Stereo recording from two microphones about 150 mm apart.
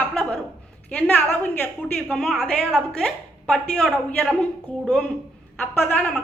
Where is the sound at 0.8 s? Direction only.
10° left (ahead or behind).